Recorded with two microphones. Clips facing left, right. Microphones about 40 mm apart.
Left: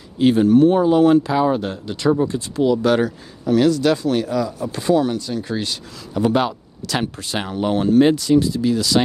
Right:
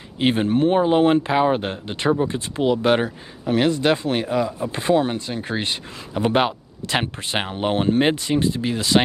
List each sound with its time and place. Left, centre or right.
0.2 s speech: right